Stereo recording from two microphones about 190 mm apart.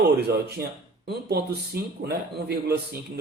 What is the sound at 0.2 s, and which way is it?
A man's voice, 60° right (ahead or behind).